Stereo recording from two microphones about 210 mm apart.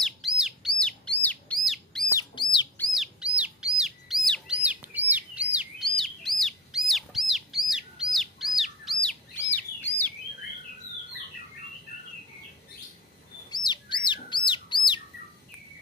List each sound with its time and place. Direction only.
0.4 s bird: centre (ahead or behind)
2.0 s bird: 20° left (ahead or behind)
2.8 s bird: centre (ahead or behind)
13.5 s bird: 20° left (ahead or behind)